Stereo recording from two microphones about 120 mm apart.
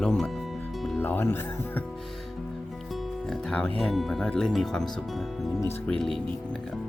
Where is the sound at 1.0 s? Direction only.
15° left (ahead or behind).